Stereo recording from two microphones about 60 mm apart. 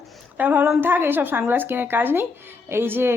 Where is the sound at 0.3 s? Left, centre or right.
Right.